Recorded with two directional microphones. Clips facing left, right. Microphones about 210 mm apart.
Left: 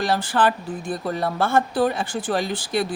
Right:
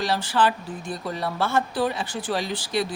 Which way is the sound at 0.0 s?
50° left (ahead or behind).